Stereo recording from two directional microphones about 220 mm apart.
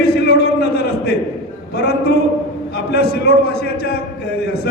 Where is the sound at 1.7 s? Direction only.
45° left (ahead or behind).